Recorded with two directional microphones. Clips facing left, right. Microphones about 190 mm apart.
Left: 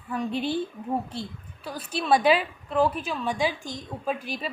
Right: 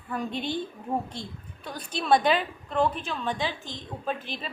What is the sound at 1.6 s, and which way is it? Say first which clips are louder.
A woman's voice: left 2 dB; 5° left (ahead or behind).